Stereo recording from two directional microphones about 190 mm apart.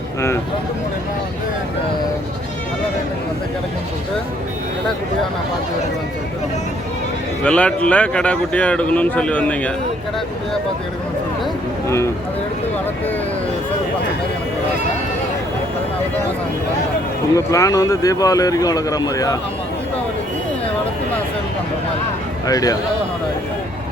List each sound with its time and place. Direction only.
7.4 s speech: 5° left (ahead or behind)
11.9 s speech: 15° left (ahead or behind)
17.3 s speech: 15° left (ahead or behind)
22.4 s speech: 20° left (ahead or behind)